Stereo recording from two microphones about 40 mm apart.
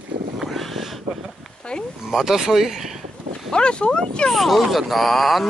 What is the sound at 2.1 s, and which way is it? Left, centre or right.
Speech, centre.